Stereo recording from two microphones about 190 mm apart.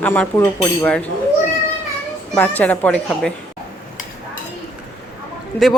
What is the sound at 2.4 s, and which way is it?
Speech, 10° left (ahead or behind).